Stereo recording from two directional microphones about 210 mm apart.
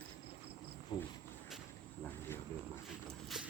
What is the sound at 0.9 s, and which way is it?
Cricket, 20° left (ahead or behind).